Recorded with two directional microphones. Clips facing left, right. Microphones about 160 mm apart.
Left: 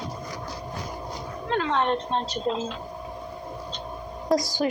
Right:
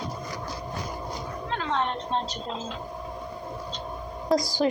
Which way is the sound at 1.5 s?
60° left (ahead or behind).